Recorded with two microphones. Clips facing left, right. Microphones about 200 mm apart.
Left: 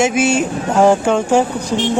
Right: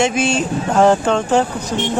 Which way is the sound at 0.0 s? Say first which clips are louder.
Left 2 dB; 5° left (ahead or behind).